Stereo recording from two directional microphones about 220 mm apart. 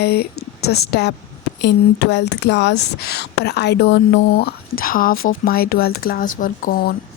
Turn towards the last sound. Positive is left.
turn(degrees=40)  # may be behind; listen again after turning